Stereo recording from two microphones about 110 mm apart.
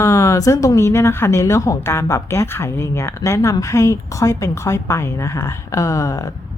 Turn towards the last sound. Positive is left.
turn(degrees=30)  # may be behind; listen again after turning